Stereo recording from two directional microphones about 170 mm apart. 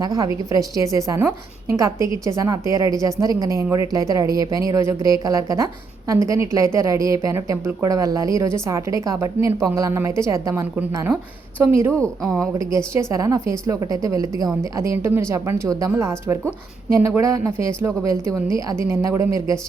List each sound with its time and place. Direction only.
0.0 s a woman's voice: 20° right (ahead or behind)
11.9 s speech: 5° left (ahead or behind)
12.5 s a woman's voice: 15° right (ahead or behind)